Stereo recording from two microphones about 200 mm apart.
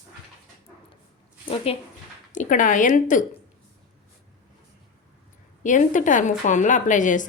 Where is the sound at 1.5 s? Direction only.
30° left (ahead or behind).